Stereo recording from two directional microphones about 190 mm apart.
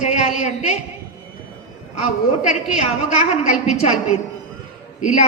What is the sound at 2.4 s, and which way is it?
A woman's voice, 40° left (ahead or behind).